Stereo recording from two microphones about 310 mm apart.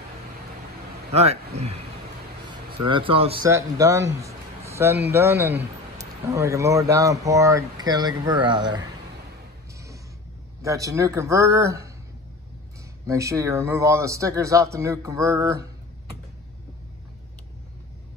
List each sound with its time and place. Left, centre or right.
1.1 s a man's voice: centre
2.8 s a man's voice: centre
10.6 s a man's voice: centre
13.0 s a man's voice: centre